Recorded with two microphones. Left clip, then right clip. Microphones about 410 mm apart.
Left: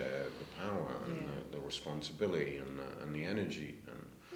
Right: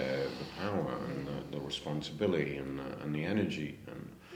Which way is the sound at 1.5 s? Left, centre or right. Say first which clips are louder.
Right 5 dB; centre.